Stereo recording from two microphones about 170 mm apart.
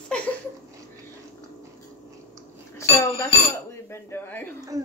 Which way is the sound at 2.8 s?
15° left (ahead or behind).